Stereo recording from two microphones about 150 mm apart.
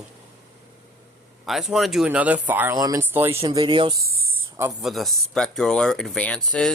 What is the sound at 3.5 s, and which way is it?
Speech, 30° right (ahead or behind).